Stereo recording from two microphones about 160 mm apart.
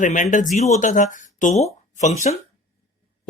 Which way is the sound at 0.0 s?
55° left (ahead or behind).